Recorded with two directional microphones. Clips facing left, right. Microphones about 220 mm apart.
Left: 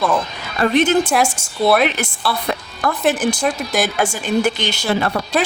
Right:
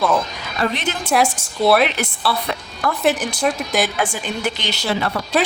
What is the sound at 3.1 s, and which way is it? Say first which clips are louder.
Speech: left 4 dB; 50° left (ahead or behind).